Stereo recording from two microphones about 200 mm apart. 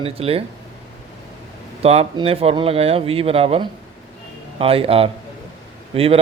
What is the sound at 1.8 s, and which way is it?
Speech, 30° right (ahead or behind).